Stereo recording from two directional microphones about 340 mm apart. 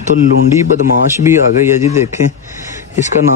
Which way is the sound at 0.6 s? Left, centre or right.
Centre.